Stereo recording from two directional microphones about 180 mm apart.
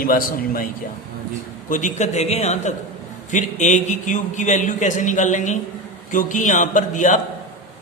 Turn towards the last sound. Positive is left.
turn(degrees=45)  # may be behind; listen again after turning